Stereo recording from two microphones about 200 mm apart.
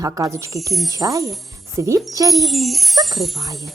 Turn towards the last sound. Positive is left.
turn(degrees=-15)  # may be behind; listen again after turning